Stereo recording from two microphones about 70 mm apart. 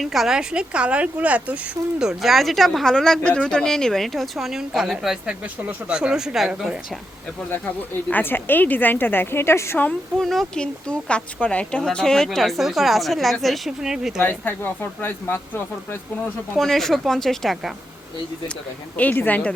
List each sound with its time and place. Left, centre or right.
0.0 s speech: centre; by 1.5 s right
2.0 s speech: centre
8.1 s speech: left
10.2 s speech: centre
10.6 s a woman's voice: centre
14.2 s speech: left
16.6 s speech: centre
18.9 s speech: left